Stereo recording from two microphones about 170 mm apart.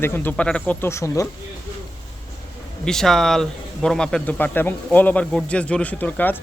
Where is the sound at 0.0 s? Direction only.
10° left (ahead or behind).